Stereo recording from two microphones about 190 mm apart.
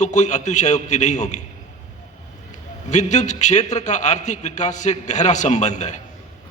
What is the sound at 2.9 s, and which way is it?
A man's voice, 40° left (ahead or behind).